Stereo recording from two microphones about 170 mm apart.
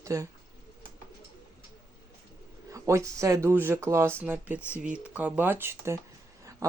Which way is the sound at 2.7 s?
15° right (ahead or behind).